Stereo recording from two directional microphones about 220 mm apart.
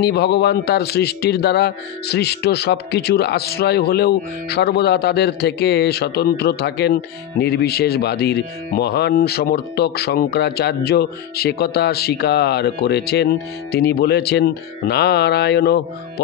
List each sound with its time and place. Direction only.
0.0 s a man's voice: 50° left (ahead or behind)